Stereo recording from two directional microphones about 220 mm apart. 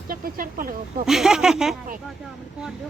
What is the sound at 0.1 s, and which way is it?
Speech, 40° right (ahead or behind).